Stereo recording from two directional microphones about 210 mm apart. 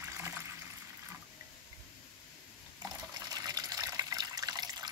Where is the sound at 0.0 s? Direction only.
10° right (ahead or behind).